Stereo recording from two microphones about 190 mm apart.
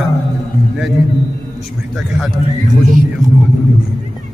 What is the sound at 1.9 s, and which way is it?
Speech, centre (ahead or behind).